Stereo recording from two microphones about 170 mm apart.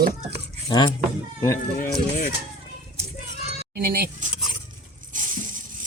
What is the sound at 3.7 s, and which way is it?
Speech, 60° right (ahead or behind).